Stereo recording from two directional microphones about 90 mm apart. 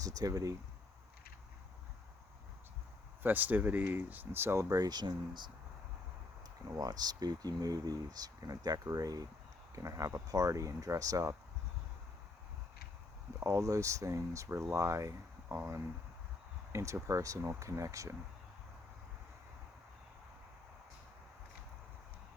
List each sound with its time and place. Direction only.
0.0 s speech: 40° right (ahead or behind)
3.2 s speech: 20° right (ahead or behind)
4.7 s speech: 50° right (ahead or behind)
6.7 s speech: 45° right (ahead or behind)
13.4 s speech: 35° right (ahead or behind)